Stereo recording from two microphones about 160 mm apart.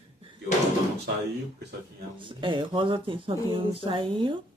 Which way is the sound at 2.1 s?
30° right (ahead or behind).